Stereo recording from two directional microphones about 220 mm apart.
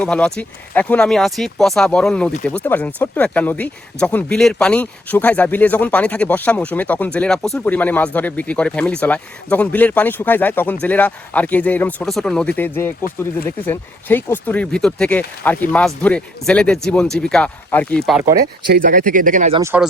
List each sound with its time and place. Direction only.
0.0 s speech: 5° left (ahead or behind)
18.3 s speech: 45° right (ahead or behind)
19.5 s speech: 10° right (ahead or behind)